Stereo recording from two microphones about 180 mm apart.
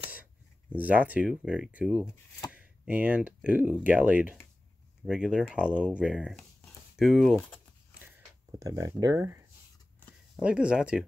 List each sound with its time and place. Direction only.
0.7 s speech: 10° right (ahead or behind)
8.0 s a sound: 20° right (ahead or behind)
10.3 s speech: 5° right (ahead or behind)